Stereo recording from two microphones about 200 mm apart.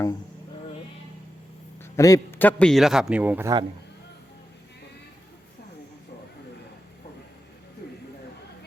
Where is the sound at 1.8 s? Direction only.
15° left (ahead or behind); by 3.5 s 10° right (ahead or behind).